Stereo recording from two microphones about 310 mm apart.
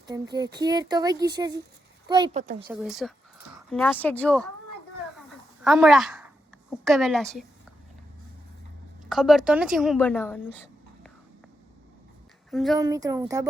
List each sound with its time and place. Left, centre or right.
0.1 s speech: centre
2.6 s a woman's voice: centre
5.6 s a woman's voice: centre
9.0 s a woman's voice: centre
12.5 s a woman's voice: centre
12.7 s speech: centre